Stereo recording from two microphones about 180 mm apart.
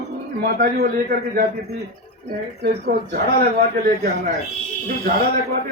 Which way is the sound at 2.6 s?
60° right (ahead or behind).